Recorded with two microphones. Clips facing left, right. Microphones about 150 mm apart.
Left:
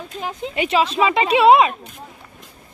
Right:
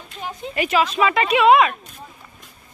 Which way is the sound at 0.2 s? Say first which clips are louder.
Left 3 dB; 90° left.